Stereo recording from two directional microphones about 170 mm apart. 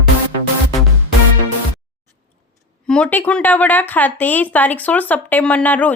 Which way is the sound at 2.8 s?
5° left (ahead or behind).